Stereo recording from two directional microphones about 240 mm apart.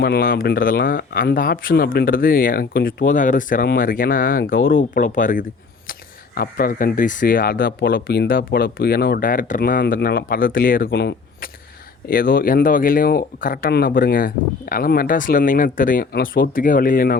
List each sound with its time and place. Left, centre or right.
0.0 s speech: left